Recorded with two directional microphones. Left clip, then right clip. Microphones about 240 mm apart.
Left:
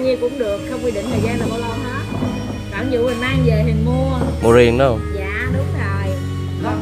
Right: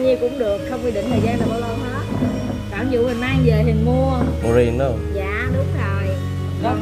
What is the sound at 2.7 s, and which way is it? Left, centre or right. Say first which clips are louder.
Speech: left 1 dB; centre.